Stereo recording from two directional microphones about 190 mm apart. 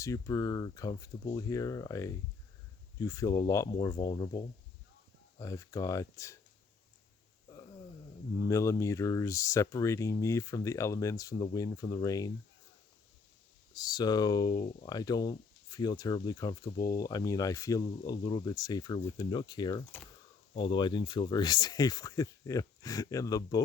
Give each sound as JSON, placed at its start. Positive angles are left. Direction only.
{"t": 0.0, "sound": "speech", "side_deg": 15}
{"t": 8.4, "sound": "speech", "side_deg": 15}
{"t": 13.7, "sound": "speech", "side_deg": 20}